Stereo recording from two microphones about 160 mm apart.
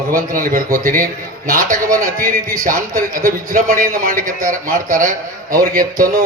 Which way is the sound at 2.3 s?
55° right (ahead or behind).